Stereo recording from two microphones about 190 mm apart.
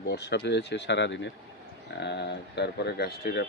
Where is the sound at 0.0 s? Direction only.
65° left (ahead or behind).